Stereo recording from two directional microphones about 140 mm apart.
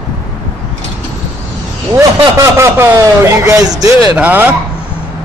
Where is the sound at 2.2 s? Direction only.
20° right (ahead or behind).